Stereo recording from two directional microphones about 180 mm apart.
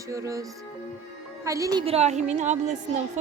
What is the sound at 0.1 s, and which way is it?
Speech, 20° right (ahead or behind).